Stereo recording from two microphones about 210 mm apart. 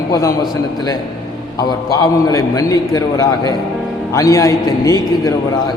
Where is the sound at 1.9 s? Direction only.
15° left (ahead or behind).